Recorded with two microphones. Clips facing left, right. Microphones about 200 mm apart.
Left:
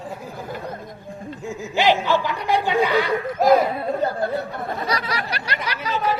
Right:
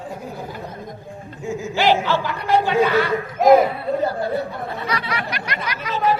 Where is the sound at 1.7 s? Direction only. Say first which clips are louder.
Even; 20° left (ahead or behind).